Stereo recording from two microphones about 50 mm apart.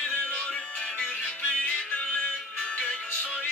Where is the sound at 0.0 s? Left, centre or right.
Left.